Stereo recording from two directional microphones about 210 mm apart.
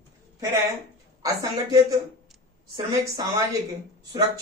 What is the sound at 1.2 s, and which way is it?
Speech, 15° right (ahead or behind).